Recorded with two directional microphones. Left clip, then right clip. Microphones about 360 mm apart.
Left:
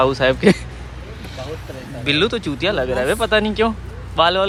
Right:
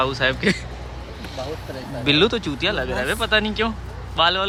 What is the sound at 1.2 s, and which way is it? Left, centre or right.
Vehicle, right.